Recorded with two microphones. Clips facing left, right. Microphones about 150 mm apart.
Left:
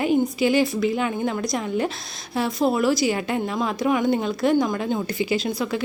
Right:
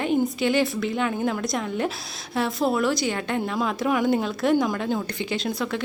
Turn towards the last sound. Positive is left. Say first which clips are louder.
# left 3 dB
turn(degrees=0)  # may be behind; listen again after turning